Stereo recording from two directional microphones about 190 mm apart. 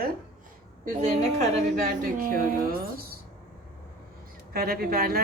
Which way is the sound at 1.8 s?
50° right (ahead or behind).